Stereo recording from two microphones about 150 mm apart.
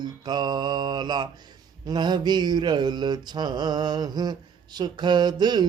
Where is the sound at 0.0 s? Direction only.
30° right (ahead or behind).